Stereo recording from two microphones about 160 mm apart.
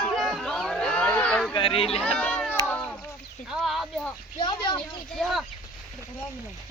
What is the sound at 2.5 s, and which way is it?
Cat, 10° left (ahead or behind).